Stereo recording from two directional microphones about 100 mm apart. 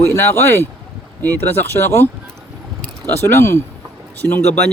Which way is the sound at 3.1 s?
25° left (ahead or behind).